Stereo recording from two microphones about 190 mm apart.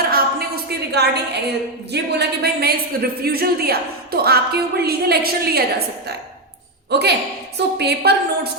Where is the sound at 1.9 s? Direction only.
60° right (ahead or behind).